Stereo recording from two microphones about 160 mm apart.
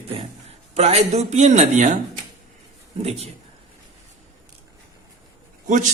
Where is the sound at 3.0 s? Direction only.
40° right (ahead or behind).